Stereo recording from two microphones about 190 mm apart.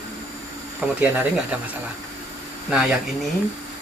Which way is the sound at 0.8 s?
5° right (ahead or behind).